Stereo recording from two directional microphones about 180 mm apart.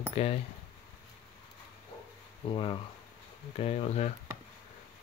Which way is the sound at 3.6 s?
35° left (ahead or behind).